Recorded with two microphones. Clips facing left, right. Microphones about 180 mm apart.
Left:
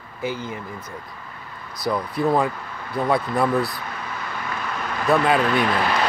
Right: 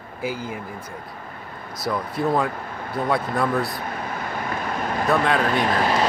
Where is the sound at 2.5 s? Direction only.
50° right (ahead or behind).